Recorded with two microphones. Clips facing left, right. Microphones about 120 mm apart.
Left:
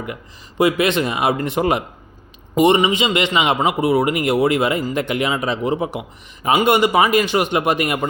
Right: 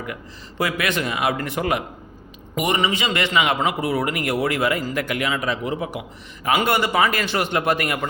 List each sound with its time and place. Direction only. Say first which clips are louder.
0.6 s a man's voice: left 7 dB; 25° left (ahead or behind)